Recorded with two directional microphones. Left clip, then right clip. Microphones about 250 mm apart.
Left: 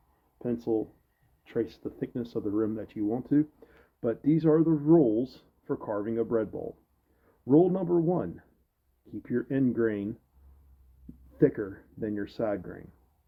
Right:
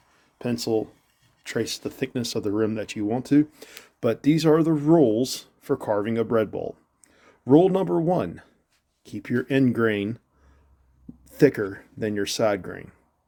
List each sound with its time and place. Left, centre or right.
0.3 s speech: right
11.3 s speech: right